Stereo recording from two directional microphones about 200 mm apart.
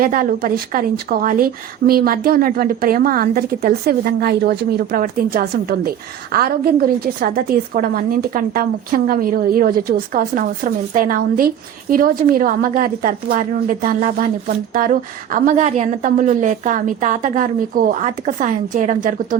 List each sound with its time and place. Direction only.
0.0 s a woman's voice: 45° right (ahead or behind)